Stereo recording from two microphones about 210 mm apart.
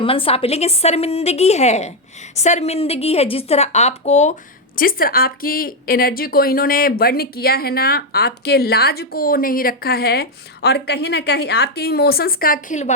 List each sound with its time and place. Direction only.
0.0 s a woman's voice: 25° left (ahead or behind)
4.8 s a woman's voice: 45° left (ahead or behind)